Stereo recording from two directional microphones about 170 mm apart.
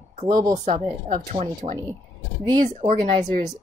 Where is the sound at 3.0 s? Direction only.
50° right (ahead or behind).